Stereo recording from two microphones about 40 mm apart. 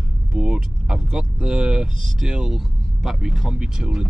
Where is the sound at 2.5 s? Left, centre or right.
Centre.